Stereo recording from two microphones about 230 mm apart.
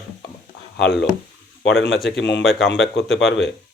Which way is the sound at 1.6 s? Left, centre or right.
Left.